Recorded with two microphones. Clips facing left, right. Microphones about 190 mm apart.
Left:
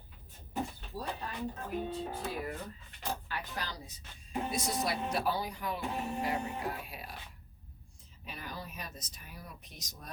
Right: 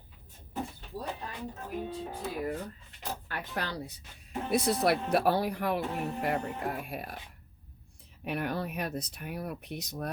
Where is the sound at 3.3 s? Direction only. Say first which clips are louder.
Right 4 dB; 60° right (ahead or behind).